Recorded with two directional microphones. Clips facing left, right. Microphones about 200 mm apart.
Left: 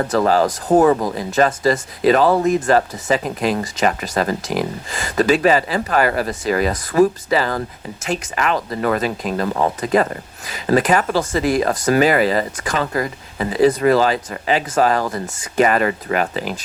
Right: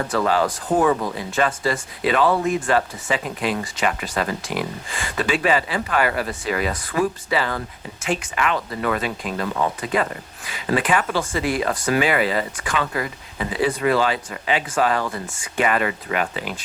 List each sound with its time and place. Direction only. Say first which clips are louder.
0.0 s speech: left 4 dB; 40° left (ahead or behind)